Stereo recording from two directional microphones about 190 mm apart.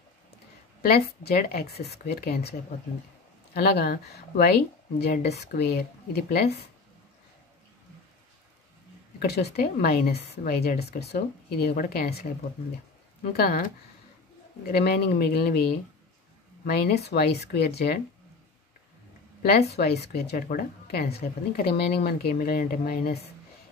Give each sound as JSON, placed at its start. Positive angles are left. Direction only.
{"t": 0.8, "sound": "speech", "side_deg": 50}
{"t": 3.5, "sound": "speech", "side_deg": 55}
{"t": 9.2, "sound": "speech", "side_deg": 60}
{"t": 13.3, "sound": "speech", "side_deg": 50}
{"t": 14.7, "sound": "speech", "side_deg": 55}
{"t": 19.7, "sound": "speech", "side_deg": 60}